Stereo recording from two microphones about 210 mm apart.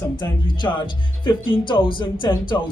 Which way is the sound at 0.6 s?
20° left (ahead or behind).